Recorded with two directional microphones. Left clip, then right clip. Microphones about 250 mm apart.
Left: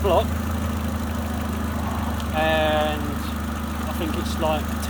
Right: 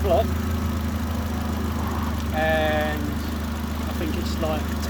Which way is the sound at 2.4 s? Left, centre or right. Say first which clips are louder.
Left 1 dB; left.